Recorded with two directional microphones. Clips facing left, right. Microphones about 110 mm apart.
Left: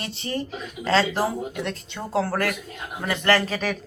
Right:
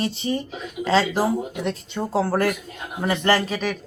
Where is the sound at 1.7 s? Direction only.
20° right (ahead or behind).